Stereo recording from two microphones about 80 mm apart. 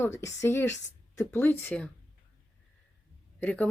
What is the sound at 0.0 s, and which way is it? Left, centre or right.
Speech, left.